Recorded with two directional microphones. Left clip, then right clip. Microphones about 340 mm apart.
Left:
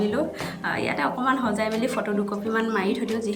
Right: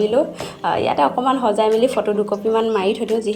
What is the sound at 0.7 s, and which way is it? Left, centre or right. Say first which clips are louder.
A woman's voice: right 9 dB; centre.